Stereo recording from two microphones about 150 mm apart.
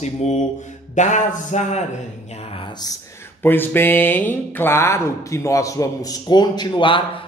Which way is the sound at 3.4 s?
15° left (ahead or behind).